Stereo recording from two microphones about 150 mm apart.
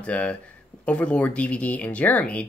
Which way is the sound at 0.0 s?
10° left (ahead or behind).